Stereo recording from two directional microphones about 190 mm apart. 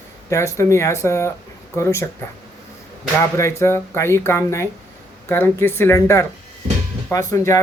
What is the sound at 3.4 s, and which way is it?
Speech, 15° left (ahead or behind).